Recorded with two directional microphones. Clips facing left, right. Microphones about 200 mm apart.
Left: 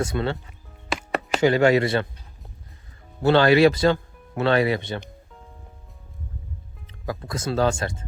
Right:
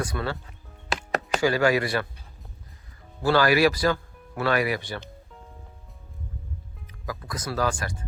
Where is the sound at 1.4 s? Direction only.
25° left (ahead or behind).